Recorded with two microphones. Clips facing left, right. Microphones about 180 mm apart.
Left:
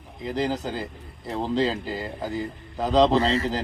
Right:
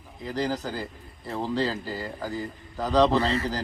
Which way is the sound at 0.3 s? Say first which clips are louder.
Left 2 dB; 20° left (ahead or behind).